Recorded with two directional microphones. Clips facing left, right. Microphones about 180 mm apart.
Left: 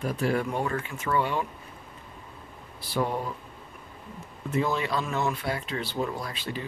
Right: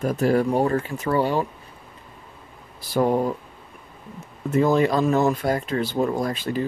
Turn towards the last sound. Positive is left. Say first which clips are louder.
# right 9 dB
turn(degrees=-45)  # may be behind; listen again after turning